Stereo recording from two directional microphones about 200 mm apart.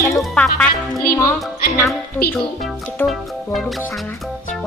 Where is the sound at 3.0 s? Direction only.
Centre (ahead or behind).